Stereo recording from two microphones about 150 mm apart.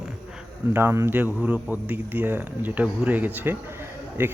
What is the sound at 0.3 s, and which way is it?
A man's voice, 15° right (ahead or behind).